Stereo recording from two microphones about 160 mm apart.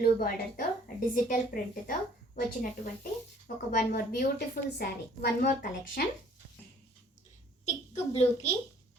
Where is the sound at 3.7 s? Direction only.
75° left (ahead or behind).